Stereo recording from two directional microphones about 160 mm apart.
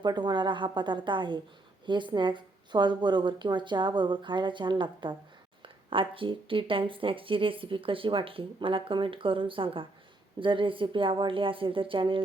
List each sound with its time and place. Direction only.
0.0 s speech: 25° right (ahead or behind)